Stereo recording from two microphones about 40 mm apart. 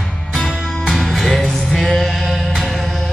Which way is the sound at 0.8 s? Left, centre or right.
Centre.